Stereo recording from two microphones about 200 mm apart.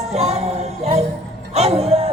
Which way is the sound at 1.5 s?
30° right (ahead or behind).